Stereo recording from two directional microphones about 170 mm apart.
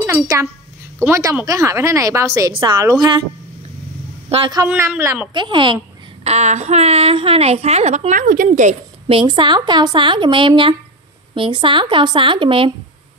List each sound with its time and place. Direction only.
0.0 s a woman's voice: 15° right (ahead or behind)
4.6 s a woman's voice: 15° right (ahead or behind)
5.3 s speech: 30° right (ahead or behind)
6.2 s a woman's voice: 40° right (ahead or behind)
9.3 s speech: 25° right (ahead or behind)